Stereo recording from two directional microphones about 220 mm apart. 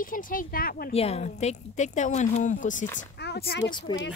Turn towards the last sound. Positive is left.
turn(degrees=20)  # may be behind; listen again after turning